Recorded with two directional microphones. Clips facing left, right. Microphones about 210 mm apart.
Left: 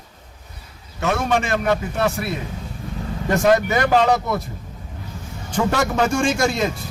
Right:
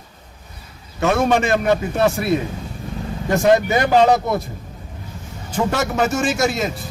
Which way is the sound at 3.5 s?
25° right (ahead or behind).